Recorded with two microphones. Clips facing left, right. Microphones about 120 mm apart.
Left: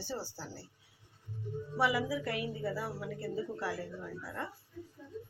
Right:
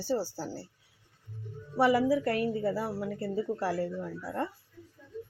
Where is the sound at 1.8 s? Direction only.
40° right (ahead or behind).